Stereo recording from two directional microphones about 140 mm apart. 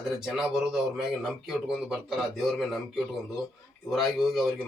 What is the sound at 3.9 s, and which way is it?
Speech, centre (ahead or behind).